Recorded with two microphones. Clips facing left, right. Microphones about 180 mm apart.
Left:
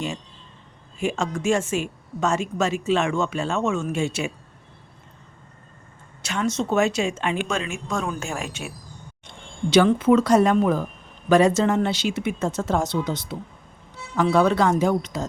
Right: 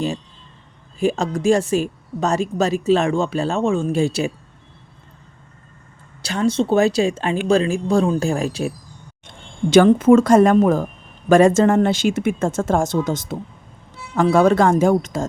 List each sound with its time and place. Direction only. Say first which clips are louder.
0.9 s a woman's voice: right 5 dB; 35° right (ahead or behind)
6.2 s a woman's voice: right 6 dB; 35° right (ahead or behind)
9.2 s speech: right 5 dB; 50° right (ahead or behind)